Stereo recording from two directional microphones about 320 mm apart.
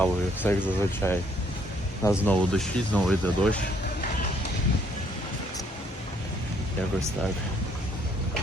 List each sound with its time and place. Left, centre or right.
0.0 s speech: centre